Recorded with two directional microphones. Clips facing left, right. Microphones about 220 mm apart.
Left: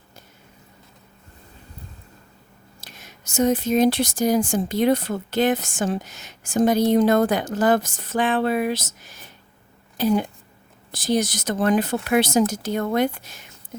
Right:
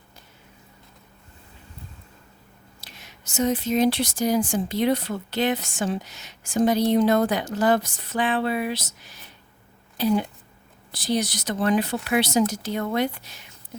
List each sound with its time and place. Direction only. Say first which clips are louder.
2.8 s speech: left 3 dB; 45° left (ahead or behind)